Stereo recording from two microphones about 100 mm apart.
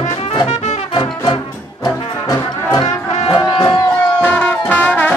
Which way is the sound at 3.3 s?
45° left (ahead or behind).